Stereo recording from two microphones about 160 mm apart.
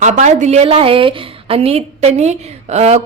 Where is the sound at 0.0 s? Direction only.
50° right (ahead or behind).